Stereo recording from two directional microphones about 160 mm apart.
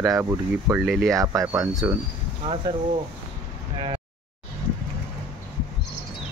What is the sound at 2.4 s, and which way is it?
Speech, 35° right (ahead or behind).